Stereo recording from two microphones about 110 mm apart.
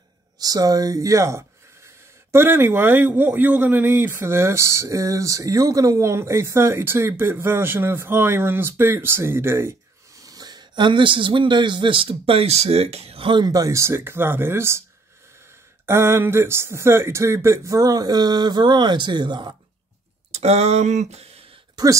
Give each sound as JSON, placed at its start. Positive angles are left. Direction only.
{"t": 0.4, "sound": "speech", "side_deg": -35}
{"t": 10.2, "sound": "speech", "side_deg": -35}
{"t": 13.3, "sound": "speech", "side_deg": -35}
{"t": 15.8, "sound": "speech", "side_deg": -20}
{"t": 20.2, "sound": "speech", "side_deg": -85}